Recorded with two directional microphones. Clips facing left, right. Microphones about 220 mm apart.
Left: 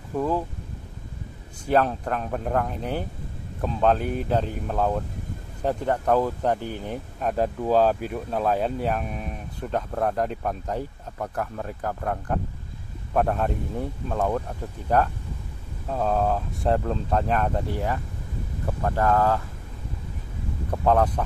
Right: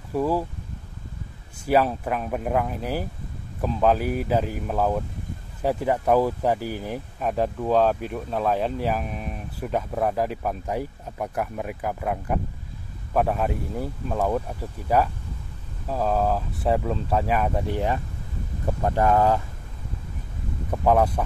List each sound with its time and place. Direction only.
0.1 s speech: 10° right (ahead or behind)
1.7 s speech: 5° right (ahead or behind)
17.6 s speech: 20° right (ahead or behind)
20.7 s speech: 10° right (ahead or behind)